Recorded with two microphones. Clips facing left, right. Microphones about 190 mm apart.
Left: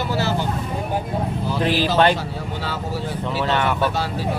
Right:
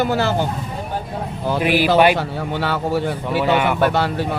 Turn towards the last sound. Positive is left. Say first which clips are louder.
# right 4 dB
turn(degrees=-65)  # may be behind; listen again after turning